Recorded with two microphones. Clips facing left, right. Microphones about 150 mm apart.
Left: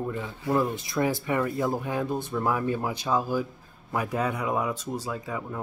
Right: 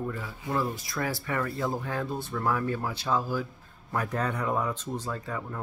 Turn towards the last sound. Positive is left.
turn(degrees=10)  # may be behind; listen again after turning